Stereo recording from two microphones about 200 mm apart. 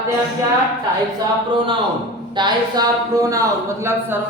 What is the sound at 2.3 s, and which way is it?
Speech, 20° right (ahead or behind).